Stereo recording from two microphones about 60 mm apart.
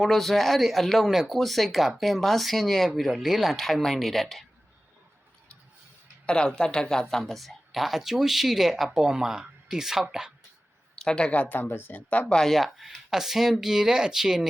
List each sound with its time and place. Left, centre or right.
0.0 s speech: centre
6.2 s speech: centre
10.9 s a woman's voice: centre; by 12.3 s left
12.3 s speech: centre